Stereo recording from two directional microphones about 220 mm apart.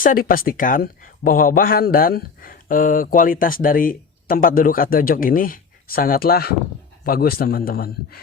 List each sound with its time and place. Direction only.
0.0 s a man's voice: 40° left (ahead or behind)